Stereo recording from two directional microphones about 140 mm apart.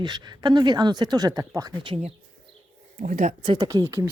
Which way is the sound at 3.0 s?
65° right (ahead or behind).